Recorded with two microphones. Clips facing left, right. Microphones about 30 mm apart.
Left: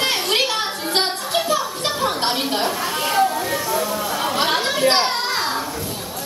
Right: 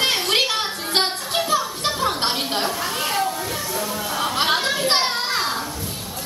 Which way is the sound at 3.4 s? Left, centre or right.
Centre.